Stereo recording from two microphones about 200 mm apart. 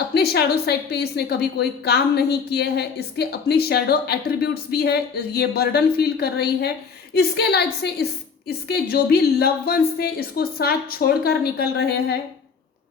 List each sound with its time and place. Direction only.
0.1 s a woman's voice: 55° left (ahead or behind)